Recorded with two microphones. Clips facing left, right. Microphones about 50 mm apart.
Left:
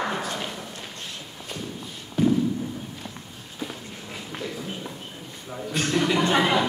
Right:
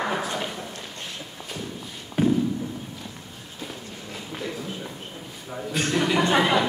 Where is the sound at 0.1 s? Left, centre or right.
Centre.